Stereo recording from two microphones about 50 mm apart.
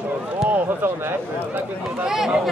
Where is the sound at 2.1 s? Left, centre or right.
Centre.